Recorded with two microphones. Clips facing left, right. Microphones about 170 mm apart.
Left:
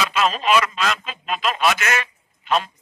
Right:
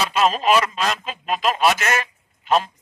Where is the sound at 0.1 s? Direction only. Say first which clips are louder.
Right 3 dB; 40° right (ahead or behind).